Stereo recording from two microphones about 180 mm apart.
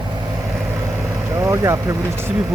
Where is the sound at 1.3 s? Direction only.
15° right (ahead or behind).